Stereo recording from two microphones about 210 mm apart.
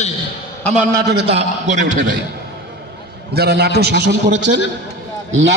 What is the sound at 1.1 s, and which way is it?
Speech, 30° right (ahead or behind).